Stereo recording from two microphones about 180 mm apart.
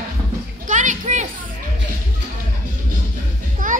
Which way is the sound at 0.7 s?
45° right (ahead or behind).